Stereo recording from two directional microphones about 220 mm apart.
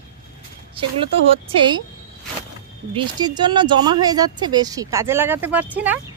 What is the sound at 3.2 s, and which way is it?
Speech, 20° right (ahead or behind).